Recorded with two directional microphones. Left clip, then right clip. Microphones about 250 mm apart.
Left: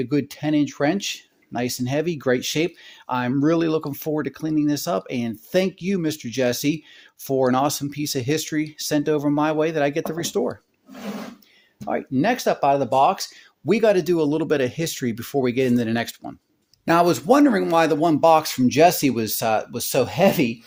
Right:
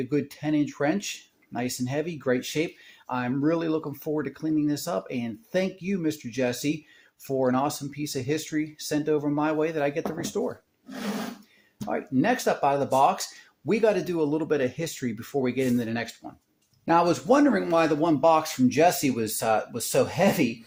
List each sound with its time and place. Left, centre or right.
0.0 s speech: left
11.9 s speech: left
13.7 s speech: left